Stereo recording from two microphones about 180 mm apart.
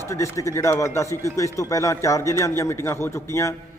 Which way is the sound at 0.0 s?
15° left (ahead or behind).